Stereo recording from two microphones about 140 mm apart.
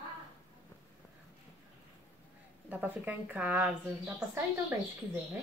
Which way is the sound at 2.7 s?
10° right (ahead or behind).